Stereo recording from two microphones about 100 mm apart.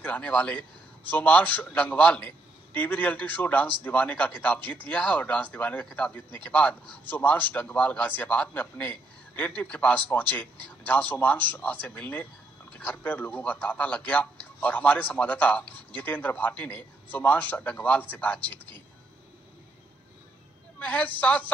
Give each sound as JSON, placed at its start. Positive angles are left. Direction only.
{"t": 0.0, "sound": "speech", "side_deg": 15}
{"t": 20.8, "sound": "speech", "side_deg": 15}